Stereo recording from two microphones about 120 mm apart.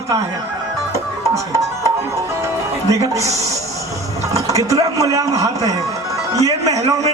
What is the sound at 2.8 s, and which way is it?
Speech, 25° right (ahead or behind).